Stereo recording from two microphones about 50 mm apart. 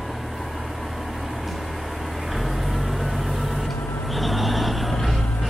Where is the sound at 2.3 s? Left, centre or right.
Centre.